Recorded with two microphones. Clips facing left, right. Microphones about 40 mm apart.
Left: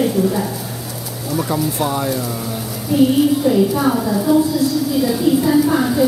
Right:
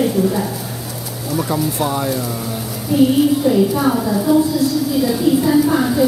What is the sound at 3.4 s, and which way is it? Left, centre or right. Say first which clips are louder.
A woman's voice: even; centre.